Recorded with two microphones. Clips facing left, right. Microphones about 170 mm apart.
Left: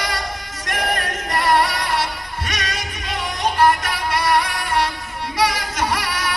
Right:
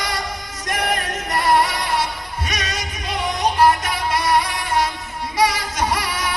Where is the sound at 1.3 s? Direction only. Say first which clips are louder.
Even; 20° right (ahead or behind).